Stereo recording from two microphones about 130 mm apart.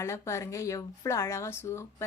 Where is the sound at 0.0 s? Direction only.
20° left (ahead or behind).